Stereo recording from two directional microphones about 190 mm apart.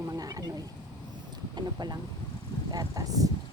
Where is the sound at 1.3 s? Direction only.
20° right (ahead or behind).